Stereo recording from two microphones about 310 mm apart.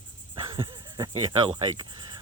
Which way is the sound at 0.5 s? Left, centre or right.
Centre.